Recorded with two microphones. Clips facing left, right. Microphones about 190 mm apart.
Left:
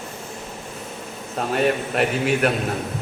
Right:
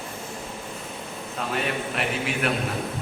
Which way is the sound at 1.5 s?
45° left (ahead or behind).